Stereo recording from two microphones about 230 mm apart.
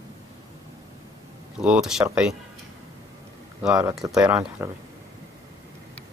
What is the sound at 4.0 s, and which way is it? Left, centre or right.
Speech, centre.